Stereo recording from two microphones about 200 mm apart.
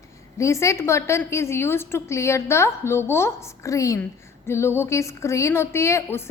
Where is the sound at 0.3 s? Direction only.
15° left (ahead or behind).